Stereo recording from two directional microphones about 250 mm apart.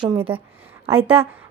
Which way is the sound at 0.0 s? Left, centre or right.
Right.